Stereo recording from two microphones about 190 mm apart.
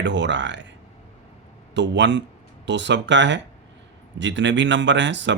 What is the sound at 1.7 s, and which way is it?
Speech, 70° right (ahead or behind).